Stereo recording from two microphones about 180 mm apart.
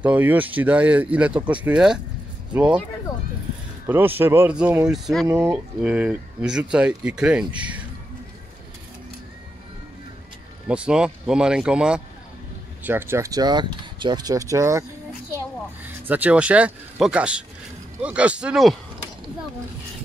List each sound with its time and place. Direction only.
0.0 s speech: 10° right (ahead or behind)
3.8 s speech: 10° right (ahead or behind)
5.3 s speech: 10° right (ahead or behind)
10.7 s speech: 5° right (ahead or behind)
16.1 s speech: 10° right (ahead or behind)